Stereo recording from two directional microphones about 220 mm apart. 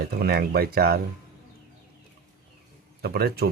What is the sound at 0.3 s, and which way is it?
Speech, 45° right (ahead or behind).